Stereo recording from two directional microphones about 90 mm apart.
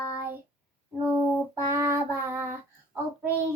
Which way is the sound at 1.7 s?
25° right (ahead or behind).